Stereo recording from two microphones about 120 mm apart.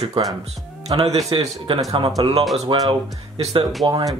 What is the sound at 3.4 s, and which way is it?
Speech, 55° right (ahead or behind).